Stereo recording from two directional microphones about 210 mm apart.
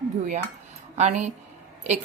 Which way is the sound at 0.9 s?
35° right (ahead or behind).